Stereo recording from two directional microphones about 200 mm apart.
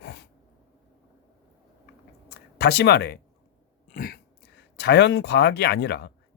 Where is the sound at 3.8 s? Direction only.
45° left (ahead or behind).